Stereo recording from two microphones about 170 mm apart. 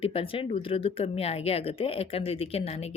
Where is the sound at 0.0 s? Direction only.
35° left (ahead or behind).